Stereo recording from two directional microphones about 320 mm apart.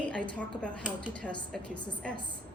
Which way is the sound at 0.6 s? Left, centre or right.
Centre.